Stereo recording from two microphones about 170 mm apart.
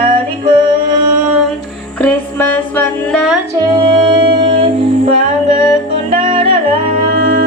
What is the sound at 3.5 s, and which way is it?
Music, 25° right (ahead or behind).